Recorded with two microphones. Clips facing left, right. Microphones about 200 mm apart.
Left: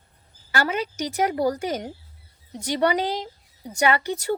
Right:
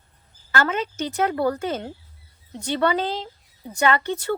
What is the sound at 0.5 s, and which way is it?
Speech, 10° left (ahead or behind).